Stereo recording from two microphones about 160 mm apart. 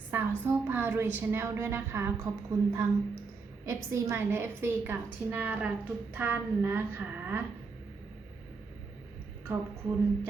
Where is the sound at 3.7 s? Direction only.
15° right (ahead or behind).